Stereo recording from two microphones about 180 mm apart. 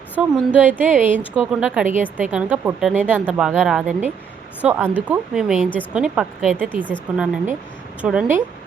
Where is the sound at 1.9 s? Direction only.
45° right (ahead or behind).